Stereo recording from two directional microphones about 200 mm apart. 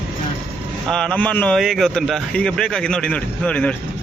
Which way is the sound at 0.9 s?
5° left (ahead or behind).